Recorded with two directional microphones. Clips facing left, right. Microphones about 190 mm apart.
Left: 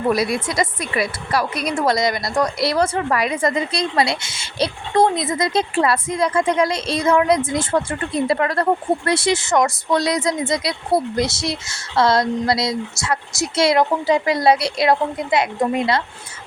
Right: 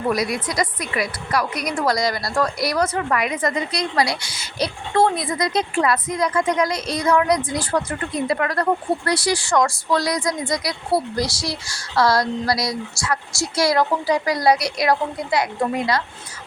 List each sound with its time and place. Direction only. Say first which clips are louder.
0.1 s a woman's voice: left 2 dB; 25° left (ahead or behind)